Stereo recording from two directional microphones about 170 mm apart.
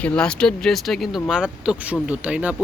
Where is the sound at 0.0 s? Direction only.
5° left (ahead or behind).